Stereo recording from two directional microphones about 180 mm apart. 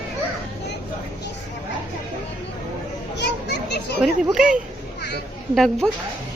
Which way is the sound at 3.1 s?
70° left (ahead or behind).